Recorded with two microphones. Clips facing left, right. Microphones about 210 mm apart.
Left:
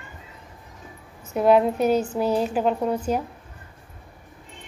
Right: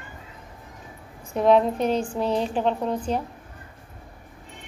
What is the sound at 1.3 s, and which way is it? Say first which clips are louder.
A woman's voice: left 1 dB; 5° left (ahead or behind).